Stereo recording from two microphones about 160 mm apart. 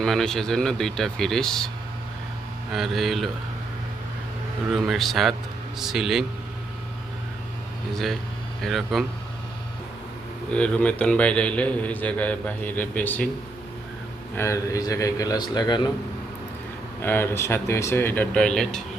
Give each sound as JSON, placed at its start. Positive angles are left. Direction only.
{"t": 0.0, "sound": "speech", "side_deg": 5}
{"t": 2.7, "sound": "speech", "side_deg": 0}
{"t": 4.7, "sound": "speech", "side_deg": 0}
{"t": 7.9, "sound": "speech", "side_deg": 0}
{"t": 10.5, "sound": "a man's voice", "side_deg": 5}
{"t": 14.3, "sound": "a man's voice", "side_deg": 20}
{"t": 17.0, "sound": "a man's voice", "side_deg": 15}